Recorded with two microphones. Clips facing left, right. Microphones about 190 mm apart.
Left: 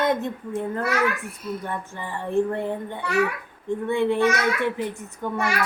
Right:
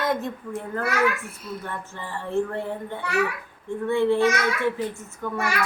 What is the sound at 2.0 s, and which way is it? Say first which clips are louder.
A woman's voice: left 2 dB; 15° left (ahead or behind).